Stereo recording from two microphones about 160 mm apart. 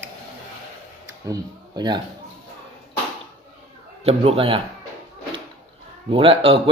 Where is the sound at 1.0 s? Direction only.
20° right (ahead or behind).